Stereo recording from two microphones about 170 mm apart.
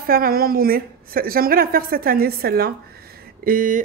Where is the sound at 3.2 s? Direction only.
55° right (ahead or behind).